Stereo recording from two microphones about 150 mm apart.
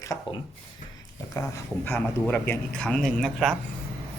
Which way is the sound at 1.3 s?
20° left (ahead or behind).